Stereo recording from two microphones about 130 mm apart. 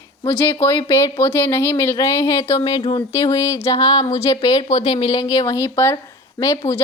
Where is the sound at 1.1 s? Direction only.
15° left (ahead or behind).